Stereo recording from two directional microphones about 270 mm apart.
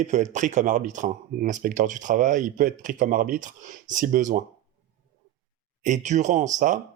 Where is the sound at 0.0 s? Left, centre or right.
Right.